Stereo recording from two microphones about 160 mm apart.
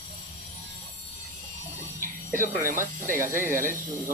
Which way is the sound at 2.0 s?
55° right (ahead or behind).